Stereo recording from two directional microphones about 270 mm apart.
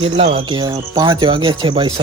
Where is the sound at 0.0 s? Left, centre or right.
Right.